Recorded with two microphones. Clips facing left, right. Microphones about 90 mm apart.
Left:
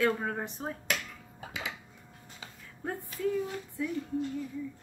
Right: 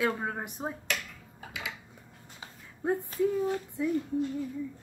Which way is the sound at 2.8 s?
20° right (ahead or behind).